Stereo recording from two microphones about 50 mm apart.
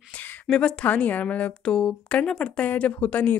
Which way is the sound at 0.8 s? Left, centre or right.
Left.